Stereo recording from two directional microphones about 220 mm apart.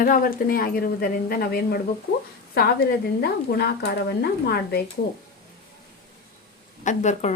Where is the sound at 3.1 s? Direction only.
45° left (ahead or behind).